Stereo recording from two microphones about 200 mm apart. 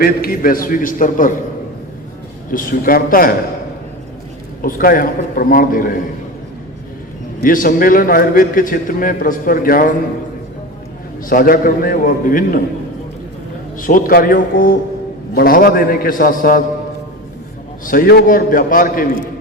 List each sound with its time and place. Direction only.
0.0 s a man's voice: 45° left (ahead or behind)
2.5 s a man's voice: 45° left (ahead or behind)
4.6 s a man's voice: 45° left (ahead or behind)
7.4 s a man's voice: 45° left (ahead or behind)
11.3 s a man's voice: 45° left (ahead or behind)
13.7 s a man's voice: 45° left (ahead or behind)
17.8 s a man's voice: 45° left (ahead or behind)